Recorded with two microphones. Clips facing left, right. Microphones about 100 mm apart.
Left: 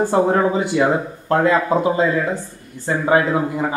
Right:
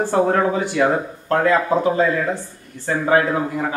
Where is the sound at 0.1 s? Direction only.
25° left (ahead or behind).